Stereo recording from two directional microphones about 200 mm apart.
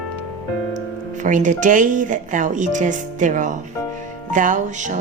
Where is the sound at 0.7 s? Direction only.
40° right (ahead or behind).